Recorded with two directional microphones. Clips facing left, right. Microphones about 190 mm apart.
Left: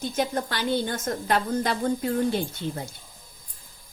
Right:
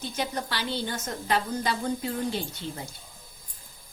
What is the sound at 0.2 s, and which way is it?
A woman's voice, 50° left (ahead or behind).